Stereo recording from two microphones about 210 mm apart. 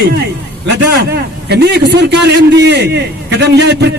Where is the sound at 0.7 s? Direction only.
50° right (ahead or behind).